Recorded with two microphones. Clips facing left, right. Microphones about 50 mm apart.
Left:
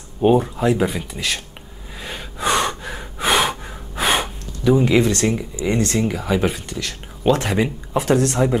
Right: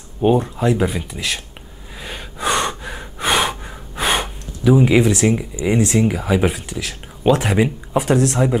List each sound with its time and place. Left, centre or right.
0.2 s speech: centre
2.0 s gasp: centre